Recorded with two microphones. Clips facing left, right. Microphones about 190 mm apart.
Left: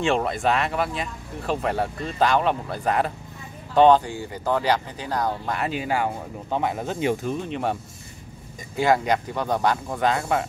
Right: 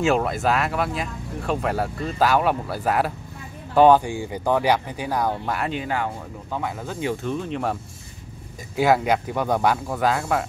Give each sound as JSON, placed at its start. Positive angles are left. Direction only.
{"t": 0.0, "sound": "speech", "side_deg": 0}
{"t": 6.5, "sound": "speech", "side_deg": 25}
{"t": 7.2, "sound": "speech", "side_deg": 0}
{"t": 8.7, "sound": "speech", "side_deg": -5}